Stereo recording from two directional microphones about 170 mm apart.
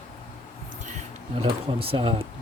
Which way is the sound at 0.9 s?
40° right (ahead or behind).